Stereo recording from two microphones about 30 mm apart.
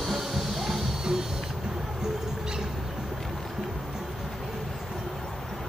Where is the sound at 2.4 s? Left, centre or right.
Centre.